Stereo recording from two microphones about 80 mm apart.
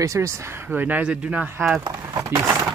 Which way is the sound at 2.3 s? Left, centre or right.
Right.